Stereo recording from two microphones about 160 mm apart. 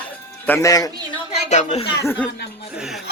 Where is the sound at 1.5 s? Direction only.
45° left (ahead or behind).